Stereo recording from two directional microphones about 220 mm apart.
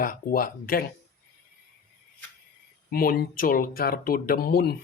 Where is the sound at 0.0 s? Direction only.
40° left (ahead or behind).